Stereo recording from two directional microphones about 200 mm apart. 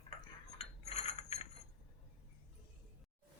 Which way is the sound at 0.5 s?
35° left (ahead or behind).